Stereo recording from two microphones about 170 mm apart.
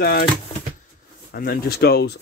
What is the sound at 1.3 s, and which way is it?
Speech, 60° left (ahead or behind).